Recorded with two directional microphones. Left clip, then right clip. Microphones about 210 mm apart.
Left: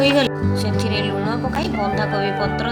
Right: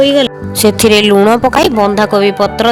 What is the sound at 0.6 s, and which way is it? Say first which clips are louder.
Speech: right 19 dB; 55° right (ahead or behind).